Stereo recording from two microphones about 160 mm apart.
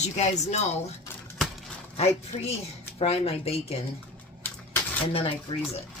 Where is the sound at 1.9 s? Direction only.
40° left (ahead or behind).